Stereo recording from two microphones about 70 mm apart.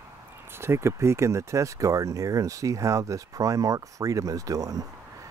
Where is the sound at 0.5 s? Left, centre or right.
Right.